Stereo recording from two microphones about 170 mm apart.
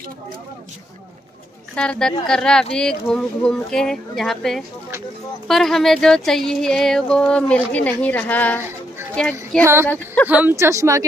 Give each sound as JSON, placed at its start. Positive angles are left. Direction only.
{"t": 1.8, "sound": "speech", "side_deg": 5}
{"t": 10.2, "sound": "speech", "side_deg": -10}